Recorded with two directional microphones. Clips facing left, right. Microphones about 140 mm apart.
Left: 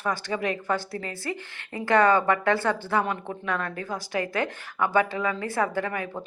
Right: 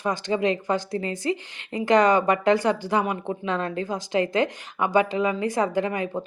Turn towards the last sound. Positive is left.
turn(degrees=-20)  # may be behind; listen again after turning